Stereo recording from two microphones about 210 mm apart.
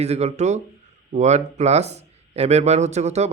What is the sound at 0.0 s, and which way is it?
Speech, 30° right (ahead or behind).